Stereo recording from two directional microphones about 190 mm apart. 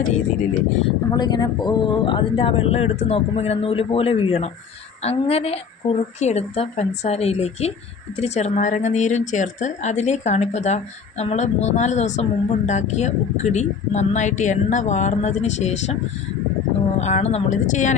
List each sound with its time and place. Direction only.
0.9 s speech: 20° left (ahead or behind)
17.0 s speech: 35° left (ahead or behind)